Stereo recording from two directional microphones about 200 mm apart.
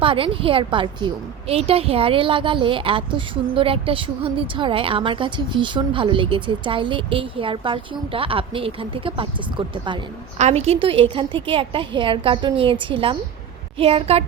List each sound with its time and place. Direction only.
0.0 s a woman's voice: 25° right (ahead or behind)